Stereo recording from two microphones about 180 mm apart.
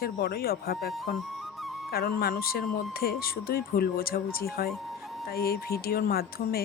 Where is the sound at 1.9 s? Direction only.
55° left (ahead or behind).